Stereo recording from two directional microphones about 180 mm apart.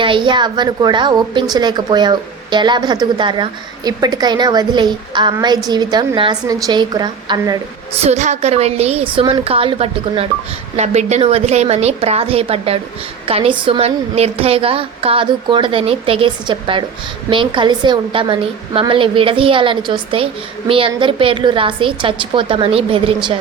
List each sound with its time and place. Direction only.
0.0 s a woman's voice: 25° right (ahead or behind)
8.0 s a woman's voice: 40° right (ahead or behind)